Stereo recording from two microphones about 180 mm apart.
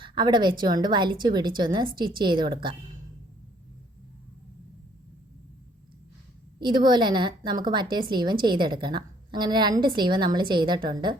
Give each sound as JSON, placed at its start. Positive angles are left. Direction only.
{"t": 0.0, "sound": "a woman's voice", "side_deg": -25}
{"t": 6.6, "sound": "a woman's voice", "side_deg": -25}